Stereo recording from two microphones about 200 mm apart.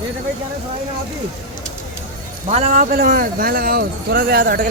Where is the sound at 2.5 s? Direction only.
35° right (ahead or behind).